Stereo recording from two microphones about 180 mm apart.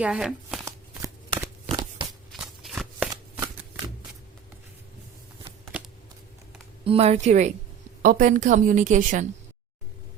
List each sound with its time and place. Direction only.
0.0 s speech: 5° right (ahead or behind)
2.3 s shuffling cards: centre (ahead or behind)
3.1 s shuffling cards: 20° right (ahead or behind)
6.8 s a woman's voice: 35° right (ahead or behind)